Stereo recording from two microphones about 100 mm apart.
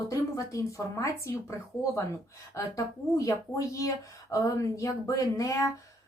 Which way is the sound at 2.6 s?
35° left (ahead or behind).